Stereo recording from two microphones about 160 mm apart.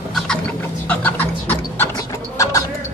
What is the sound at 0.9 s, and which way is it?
Music, 10° left (ahead or behind).